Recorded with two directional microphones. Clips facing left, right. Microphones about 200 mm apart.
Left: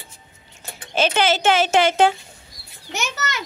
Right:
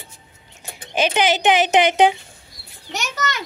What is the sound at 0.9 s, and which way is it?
A child's voice, 15° right (ahead or behind).